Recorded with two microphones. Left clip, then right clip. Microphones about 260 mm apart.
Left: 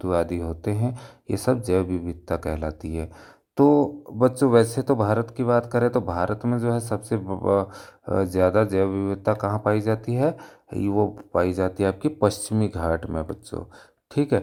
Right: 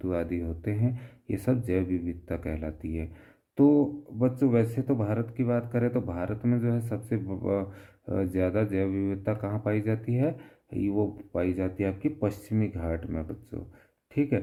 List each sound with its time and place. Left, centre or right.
0.0 s a man's voice: centre